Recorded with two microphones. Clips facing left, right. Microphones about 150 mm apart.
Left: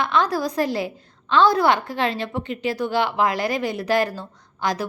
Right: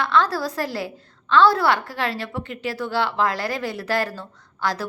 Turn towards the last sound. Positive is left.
turn(degrees=15)  # may be behind; listen again after turning